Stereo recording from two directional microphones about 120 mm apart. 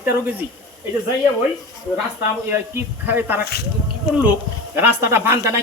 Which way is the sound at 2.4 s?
15° right (ahead or behind).